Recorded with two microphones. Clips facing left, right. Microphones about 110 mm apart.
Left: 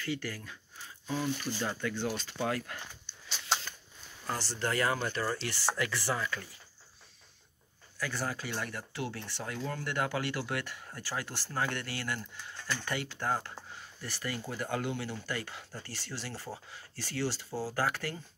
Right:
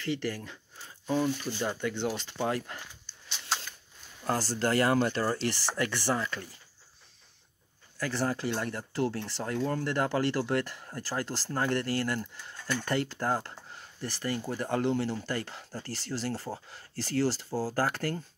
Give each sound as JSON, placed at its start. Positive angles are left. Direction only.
{"t": 0.0, "sound": "speech", "side_deg": -30}
{"t": 4.2, "sound": "speech", "side_deg": -45}
{"t": 8.1, "sound": "speech", "side_deg": -30}
{"t": 14.5, "sound": "speech", "side_deg": -35}